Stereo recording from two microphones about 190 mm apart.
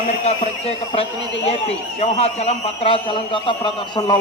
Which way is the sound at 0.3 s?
30° left (ahead or behind).